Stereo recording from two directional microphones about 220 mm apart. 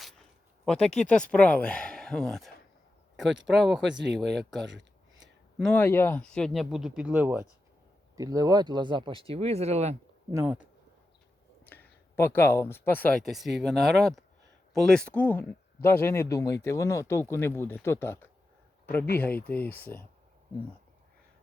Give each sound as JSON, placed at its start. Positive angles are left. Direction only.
{"t": 0.0, "sound": "speech", "side_deg": 0}
{"t": 3.9, "sound": "speech", "side_deg": -55}
{"t": 5.5, "sound": "speech", "side_deg": 5}
{"t": 10.3, "sound": "speech", "side_deg": -5}
{"t": 11.6, "sound": "speech", "side_deg": 10}
{"t": 19.5, "sound": "speech", "side_deg": 10}